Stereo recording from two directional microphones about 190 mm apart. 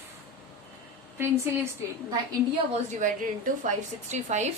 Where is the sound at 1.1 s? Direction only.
15° right (ahead or behind).